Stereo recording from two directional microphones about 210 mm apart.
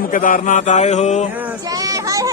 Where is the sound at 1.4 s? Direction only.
15° right (ahead or behind).